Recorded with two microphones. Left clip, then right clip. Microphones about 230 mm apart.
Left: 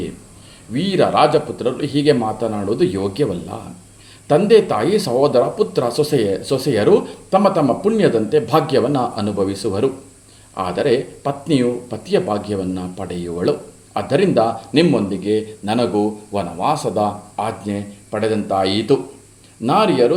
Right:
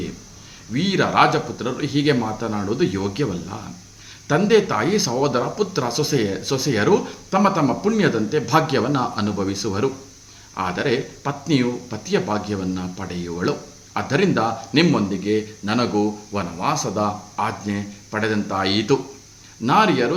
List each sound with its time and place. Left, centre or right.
0.7 s speech: centre
10.6 s speech: centre